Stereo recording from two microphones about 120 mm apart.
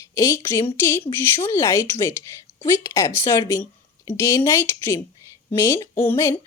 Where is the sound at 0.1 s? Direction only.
25° left (ahead or behind).